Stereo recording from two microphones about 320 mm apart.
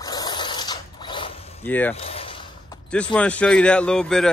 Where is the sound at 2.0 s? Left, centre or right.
Centre.